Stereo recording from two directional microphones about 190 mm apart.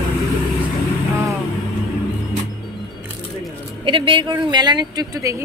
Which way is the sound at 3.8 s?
25° right (ahead or behind).